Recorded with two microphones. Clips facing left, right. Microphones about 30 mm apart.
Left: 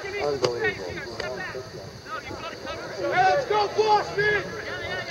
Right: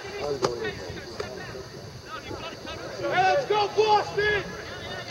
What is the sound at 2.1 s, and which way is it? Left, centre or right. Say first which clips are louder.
Speech: left 2 dB; centre.